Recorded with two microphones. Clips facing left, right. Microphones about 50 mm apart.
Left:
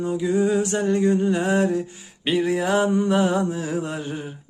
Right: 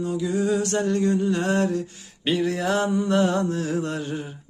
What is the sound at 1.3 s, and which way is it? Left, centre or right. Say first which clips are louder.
Mantra: left 2 dB; centre.